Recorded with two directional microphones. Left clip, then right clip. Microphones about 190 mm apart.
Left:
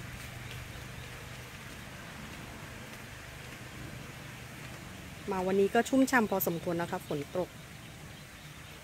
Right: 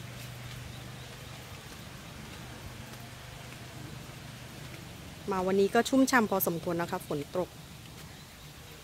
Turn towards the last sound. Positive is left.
turn(degrees=-5)  # may be behind; listen again after turning